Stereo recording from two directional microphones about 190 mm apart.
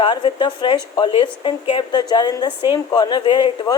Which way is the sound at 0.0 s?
25° left (ahead or behind).